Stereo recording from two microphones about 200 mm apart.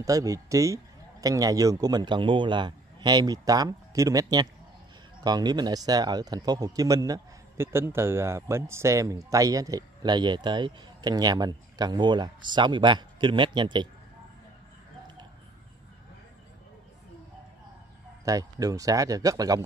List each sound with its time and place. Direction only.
0.0 s a man's voice: 15° right (ahead or behind)
18.2 s speech: 15° right (ahead or behind)